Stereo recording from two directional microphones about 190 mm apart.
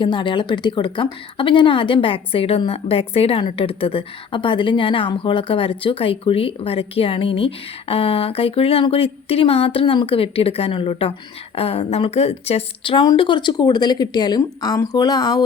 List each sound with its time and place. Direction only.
0.0 s speech: 25° left (ahead or behind)